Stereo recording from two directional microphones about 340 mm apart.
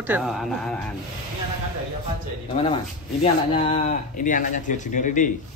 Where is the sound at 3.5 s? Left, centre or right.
Centre.